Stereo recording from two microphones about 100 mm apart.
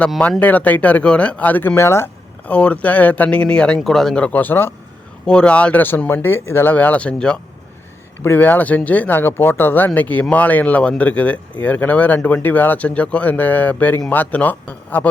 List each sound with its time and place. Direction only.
0.2 s speech: 15° left (ahead or behind)
2.5 s speech: 10° left (ahead or behind)
5.2 s speech: 10° left (ahead or behind)
8.2 s speech: 20° left (ahead or behind)